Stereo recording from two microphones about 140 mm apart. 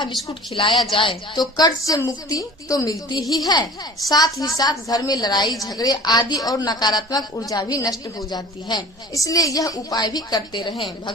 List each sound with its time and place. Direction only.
0.5 s a woman's voice: 35° left (ahead or behind)